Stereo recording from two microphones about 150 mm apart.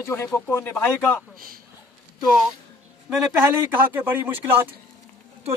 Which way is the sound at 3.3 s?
15° right (ahead or behind).